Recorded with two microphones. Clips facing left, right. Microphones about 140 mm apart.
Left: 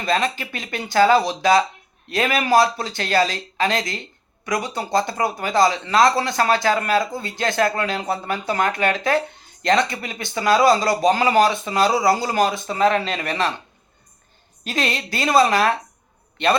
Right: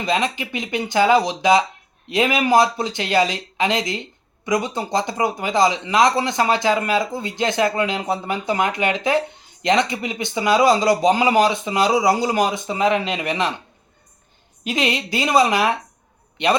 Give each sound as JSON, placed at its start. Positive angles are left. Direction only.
{"t": 0.0, "sound": "a man's voice", "side_deg": -20}
{"t": 14.6, "sound": "a man's voice", "side_deg": -15}